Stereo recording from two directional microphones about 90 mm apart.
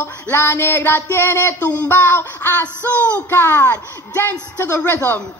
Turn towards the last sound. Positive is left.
turn(degrees=20)  # may be behind; listen again after turning